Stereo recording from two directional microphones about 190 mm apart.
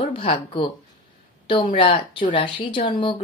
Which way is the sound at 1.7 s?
25° left (ahead or behind).